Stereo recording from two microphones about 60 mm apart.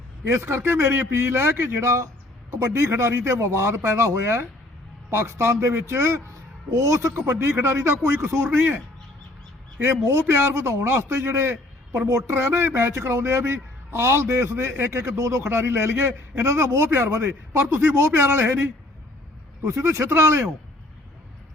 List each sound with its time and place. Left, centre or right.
0.3 s a man's voice: right
2.5 s a man's voice: right
2.7 s a man's voice: right
6.7 s a man's voice: right
10.2 s a man's voice: right
12.0 s speech: right
12.3 s a man's voice: right
15.4 s a man's voice: right
19.6 s a man's voice: right